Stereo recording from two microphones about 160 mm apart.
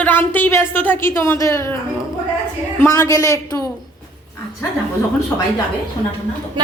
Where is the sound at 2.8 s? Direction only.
20° left (ahead or behind).